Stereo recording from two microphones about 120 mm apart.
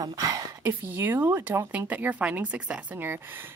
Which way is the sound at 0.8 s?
15° right (ahead or behind).